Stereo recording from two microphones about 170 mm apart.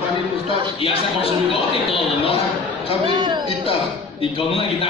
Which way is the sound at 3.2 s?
25° right (ahead or behind).